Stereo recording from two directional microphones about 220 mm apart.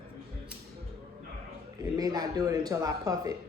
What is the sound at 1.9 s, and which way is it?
Speech, 15° right (ahead or behind).